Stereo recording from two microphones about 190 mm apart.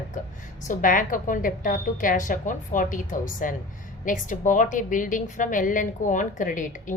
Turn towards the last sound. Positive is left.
turn(degrees=45)  # may be behind; listen again after turning